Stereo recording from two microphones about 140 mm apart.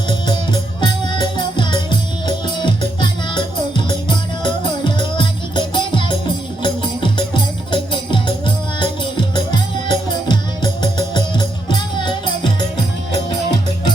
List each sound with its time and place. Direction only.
0.1 s music: 35° left (ahead or behind)